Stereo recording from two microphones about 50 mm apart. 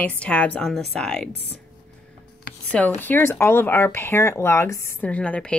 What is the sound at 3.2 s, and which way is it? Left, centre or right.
Speech, left.